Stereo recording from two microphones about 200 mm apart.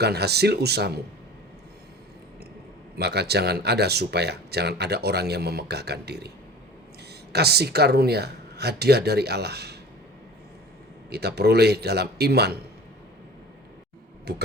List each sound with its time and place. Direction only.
0.0 s speech: 55° right (ahead or behind)
3.0 s speech: 55° right (ahead or behind)
7.3 s speech: 55° right (ahead or behind)
11.1 s speech: 55° right (ahead or behind)
14.3 s speech: 55° right (ahead or behind)